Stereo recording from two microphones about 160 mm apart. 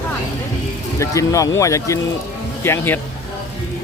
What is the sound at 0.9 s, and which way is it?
Speech, 20° left (ahead or behind).